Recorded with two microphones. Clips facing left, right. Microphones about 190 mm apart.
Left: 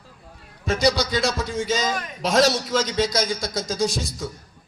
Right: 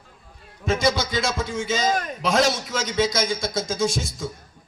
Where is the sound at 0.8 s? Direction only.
50° right (ahead or behind).